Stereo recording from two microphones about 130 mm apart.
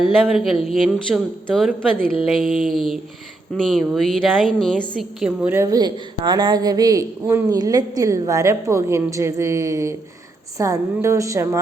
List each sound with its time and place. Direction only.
0.0 s a woman's voice: centre (ahead or behind)
5.2 s a woman's voice: 10° right (ahead or behind)
5.6 s a woman's voice: 30° right (ahead or behind)